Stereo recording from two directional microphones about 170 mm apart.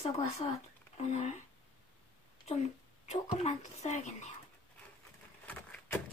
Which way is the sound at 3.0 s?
45° left (ahead or behind).